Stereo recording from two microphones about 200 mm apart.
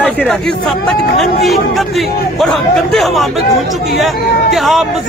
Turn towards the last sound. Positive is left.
turn(degrees=0)  # may be behind; listen again after turning